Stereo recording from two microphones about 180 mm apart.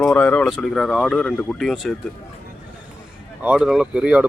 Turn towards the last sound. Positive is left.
turn(degrees=-5)  # may be behind; listen again after turning